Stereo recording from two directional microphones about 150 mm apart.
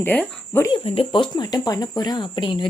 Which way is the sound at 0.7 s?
35° left (ahead or behind).